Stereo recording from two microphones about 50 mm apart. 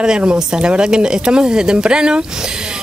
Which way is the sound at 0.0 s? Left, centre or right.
Centre.